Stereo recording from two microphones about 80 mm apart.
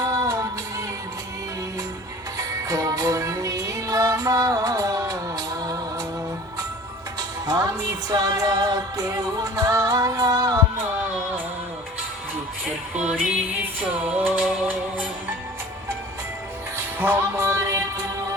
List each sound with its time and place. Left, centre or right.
0.0 s music: right
2.4 s music: right
7.2 s music: right
12.9 s music: centre
17.0 s music: right